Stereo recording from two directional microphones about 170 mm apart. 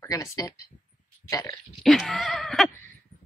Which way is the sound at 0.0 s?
20° left (ahead or behind).